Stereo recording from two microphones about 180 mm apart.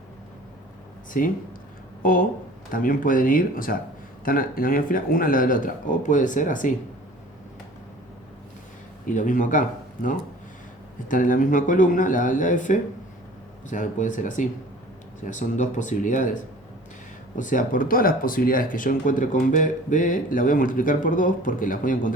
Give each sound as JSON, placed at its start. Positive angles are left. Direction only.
{"t": 1.2, "sound": "speech", "side_deg": 50}
{"t": 9.0, "sound": "speech", "side_deg": 45}